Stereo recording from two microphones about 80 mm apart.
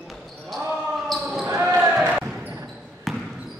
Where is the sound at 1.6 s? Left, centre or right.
Right.